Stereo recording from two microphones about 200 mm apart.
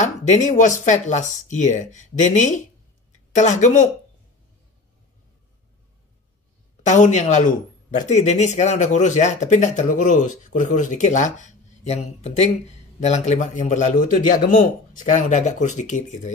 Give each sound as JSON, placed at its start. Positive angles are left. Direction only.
{"t": 0.0, "sound": "a man's voice", "side_deg": 40}
{"t": 6.9, "sound": "a man's voice", "side_deg": 35}